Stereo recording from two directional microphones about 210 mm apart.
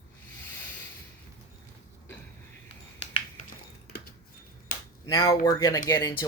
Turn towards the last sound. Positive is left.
turn(degrees=15)  # may be behind; listen again after turning